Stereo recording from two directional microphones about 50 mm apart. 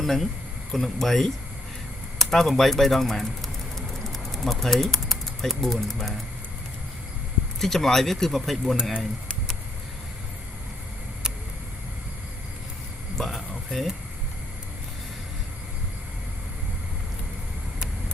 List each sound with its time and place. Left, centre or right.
0.0 s speech: centre
2.1 s bird: centre
7.6 s speech: centre
8.7 s speech: centre
13.1 s a sound: centre